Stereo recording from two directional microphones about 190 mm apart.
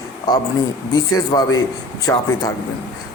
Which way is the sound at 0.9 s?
20° left (ahead or behind).